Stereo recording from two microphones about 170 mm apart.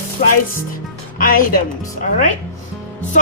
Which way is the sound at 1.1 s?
55° left (ahead or behind).